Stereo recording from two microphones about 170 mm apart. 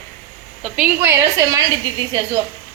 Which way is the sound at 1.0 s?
20° right (ahead or behind).